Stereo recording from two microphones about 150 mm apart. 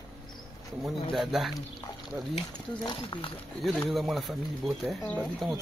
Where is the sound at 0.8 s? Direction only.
Centre (ahead or behind).